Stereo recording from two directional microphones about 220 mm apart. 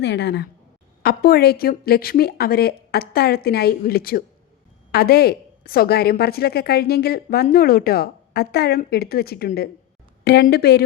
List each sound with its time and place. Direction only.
0.0 s a woman's voice: 50° left (ahead or behind)